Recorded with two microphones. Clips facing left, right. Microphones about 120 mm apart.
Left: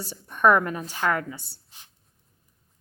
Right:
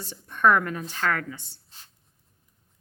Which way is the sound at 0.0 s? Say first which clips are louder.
Left 1 dB; 10° left (ahead or behind).